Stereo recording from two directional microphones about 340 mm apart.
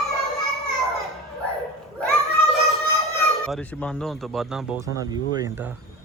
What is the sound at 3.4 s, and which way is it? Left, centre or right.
Speech, centre.